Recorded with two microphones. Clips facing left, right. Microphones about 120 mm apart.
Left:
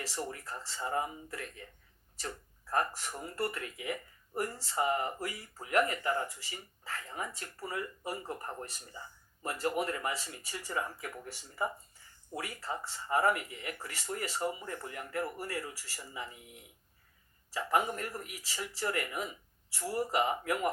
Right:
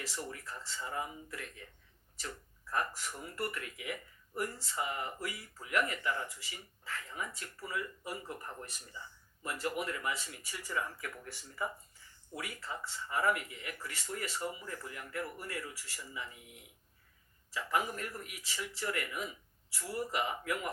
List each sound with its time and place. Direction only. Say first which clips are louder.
0.0 s speech: left 3 dB; 40° left (ahead or behind)
12.3 s speech: left 4 dB; 35° left (ahead or behind)
17.5 s speech: left 4 dB; 35° left (ahead or behind)